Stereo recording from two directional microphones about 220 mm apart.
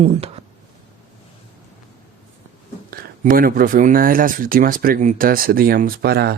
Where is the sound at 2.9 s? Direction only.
40° right (ahead or behind).